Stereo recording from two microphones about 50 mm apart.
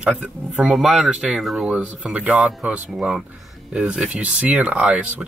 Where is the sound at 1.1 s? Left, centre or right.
Centre.